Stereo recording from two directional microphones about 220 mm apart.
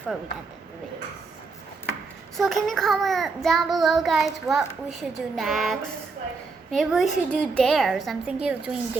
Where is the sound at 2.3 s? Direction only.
Centre (ahead or behind).